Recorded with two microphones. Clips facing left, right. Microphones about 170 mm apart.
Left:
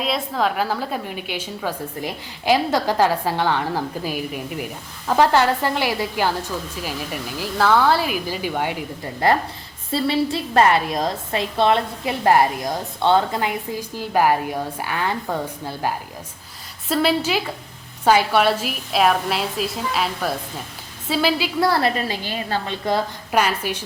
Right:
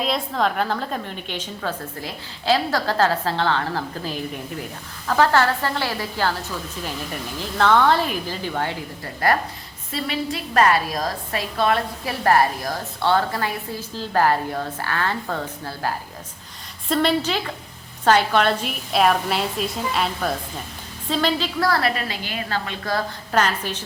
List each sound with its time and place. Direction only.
0.0 s a woman's voice: centre (ahead or behind)
9.2 s a woman's voice: 25° left (ahead or behind)
16.9 s a woman's voice: 5° left (ahead or behind)
21.6 s a woman's voice: 20° left (ahead or behind)
23.4 s a woman's voice: 10° left (ahead or behind)